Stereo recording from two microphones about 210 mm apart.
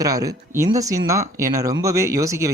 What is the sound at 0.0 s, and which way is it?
Speech, 15° right (ahead or behind).